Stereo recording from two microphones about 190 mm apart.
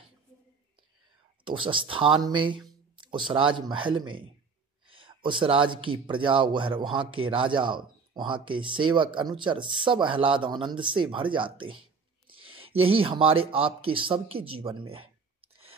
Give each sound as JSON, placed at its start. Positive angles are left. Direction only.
{"t": 1.4, "sound": "speech", "side_deg": -25}